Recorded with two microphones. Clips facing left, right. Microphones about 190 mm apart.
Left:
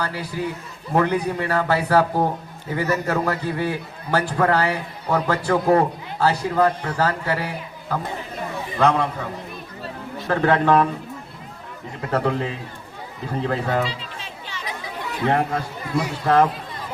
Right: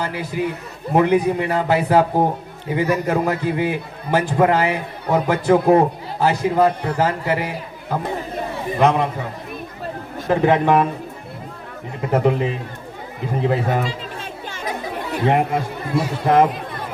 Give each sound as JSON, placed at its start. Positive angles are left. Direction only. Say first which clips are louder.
{"t": 0.0, "sound": "a man's voice", "louder": "right 3 dB", "side_deg": -20}
{"t": 10.2, "sound": "a man's voice", "louder": "right 2 dB", "side_deg": -15}
{"t": 12.1, "sound": "a man's voice", "louder": "right 4 dB", "side_deg": -15}
{"t": 13.8, "sound": "chatter", "louder": "right 3 dB", "side_deg": -50}
{"t": 15.2, "sound": "a man's voice", "louder": "right 3 dB", "side_deg": -20}